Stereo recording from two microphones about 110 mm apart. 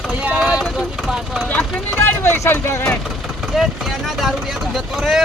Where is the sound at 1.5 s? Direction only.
15° left (ahead or behind).